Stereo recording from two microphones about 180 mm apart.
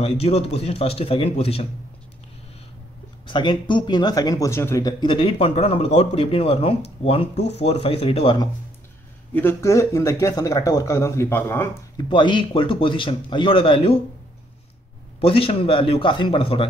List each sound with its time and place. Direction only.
0.0 s speech: 35° left (ahead or behind)
3.3 s speech: 25° left (ahead or behind)
9.3 s speech: 10° left (ahead or behind)
12.1 s a man's voice: 25° left (ahead or behind)
15.1 s a man's voice: 30° left (ahead or behind)